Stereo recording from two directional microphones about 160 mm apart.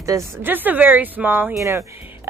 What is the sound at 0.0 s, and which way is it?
A woman's voice, 15° right (ahead or behind).